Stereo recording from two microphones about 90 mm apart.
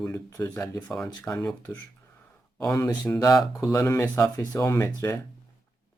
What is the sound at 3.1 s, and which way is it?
Speech, 45° left (ahead or behind).